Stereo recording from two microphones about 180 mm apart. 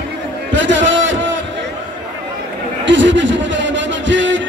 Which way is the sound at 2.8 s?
90° right.